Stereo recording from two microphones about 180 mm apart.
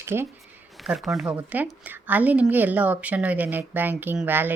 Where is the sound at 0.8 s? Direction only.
Centre (ahead or behind).